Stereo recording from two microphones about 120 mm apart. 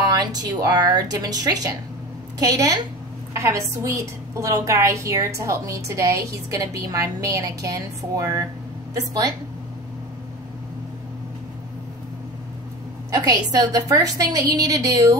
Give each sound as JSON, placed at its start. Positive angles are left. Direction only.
{"t": 0.1, "sound": "a woman's voice", "side_deg": -35}
{"t": 13.2, "sound": "a woman's voice", "side_deg": -30}